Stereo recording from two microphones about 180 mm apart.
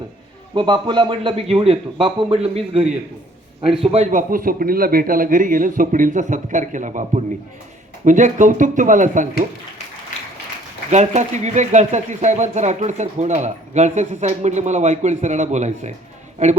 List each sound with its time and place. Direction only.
0.5 s a man's voice: 25° right (ahead or behind); by 9.2 s 45° right (ahead or behind)
10.9 s speech: 40° right (ahead or behind)